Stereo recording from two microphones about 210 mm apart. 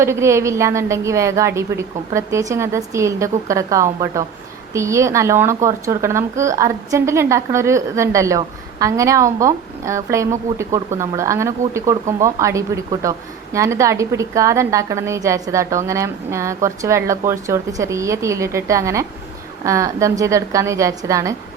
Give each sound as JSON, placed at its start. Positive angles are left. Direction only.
{"t": 0.0, "sound": "speech", "side_deg": -15}